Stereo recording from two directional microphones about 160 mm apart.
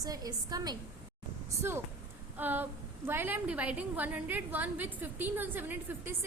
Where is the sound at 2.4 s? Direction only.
10° right (ahead or behind).